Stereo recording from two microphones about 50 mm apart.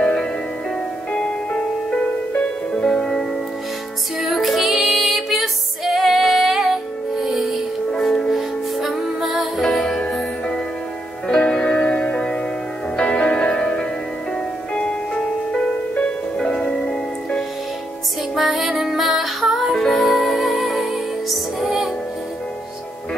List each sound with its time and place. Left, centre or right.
0.0 s music: centre
7.9 s music: centre
8.3 s music: centre
9.6 s music: centre
11.2 s music: centre
18.3 s music: centre
19.7 s music: centre